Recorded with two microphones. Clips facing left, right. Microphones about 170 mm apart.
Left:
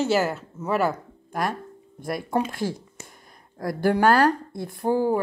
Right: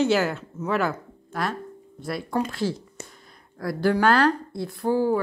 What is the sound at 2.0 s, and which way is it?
Speech, 50° left (ahead or behind).